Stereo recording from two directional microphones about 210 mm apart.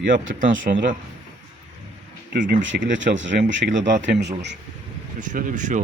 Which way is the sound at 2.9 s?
60° right (ahead or behind).